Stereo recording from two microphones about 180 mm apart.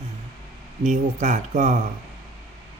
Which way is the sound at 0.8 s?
40° right (ahead or behind).